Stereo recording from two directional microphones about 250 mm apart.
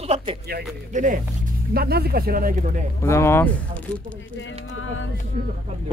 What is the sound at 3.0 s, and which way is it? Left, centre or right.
Speech, centre.